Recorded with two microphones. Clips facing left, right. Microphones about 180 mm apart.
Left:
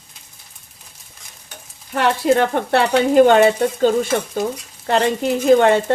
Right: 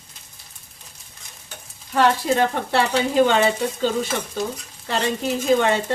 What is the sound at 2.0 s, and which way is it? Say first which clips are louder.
Speech: left 2 dB; 60° left (ahead or behind).